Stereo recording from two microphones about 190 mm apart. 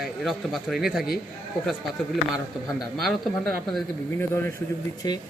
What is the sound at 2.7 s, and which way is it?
Speech, centre (ahead or behind).